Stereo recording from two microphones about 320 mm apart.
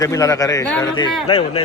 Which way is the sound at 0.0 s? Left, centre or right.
Centre.